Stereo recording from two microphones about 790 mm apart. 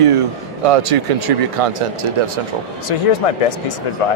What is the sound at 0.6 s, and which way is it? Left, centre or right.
Speech, right.